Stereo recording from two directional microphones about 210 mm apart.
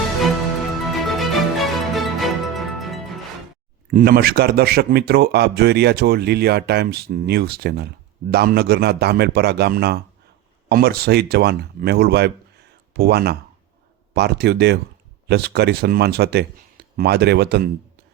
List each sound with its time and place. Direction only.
0.9 s music: centre (ahead or behind)
3.9 s speech: 45° right (ahead or behind)